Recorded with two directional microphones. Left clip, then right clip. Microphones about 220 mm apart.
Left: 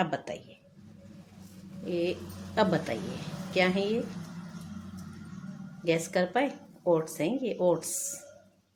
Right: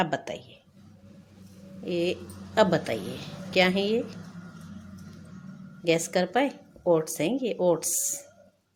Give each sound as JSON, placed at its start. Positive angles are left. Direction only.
{"t": 0.0, "sound": "a woman's voice", "side_deg": -15}
{"t": 1.8, "sound": "a woman's voice", "side_deg": -15}
{"t": 5.8, "sound": "a woman's voice", "side_deg": -15}